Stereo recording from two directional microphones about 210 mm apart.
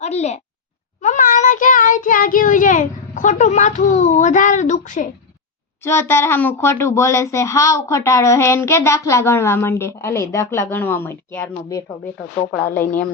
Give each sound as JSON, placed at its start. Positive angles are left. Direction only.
{"t": 0.0, "sound": "a child's voice", "side_deg": 30}
{"t": 1.0, "sound": "child singing", "side_deg": 35}
{"t": 5.8, "sound": "a child's voice", "side_deg": 10}